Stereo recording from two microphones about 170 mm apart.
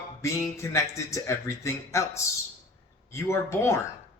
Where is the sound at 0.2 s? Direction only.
15° left (ahead or behind).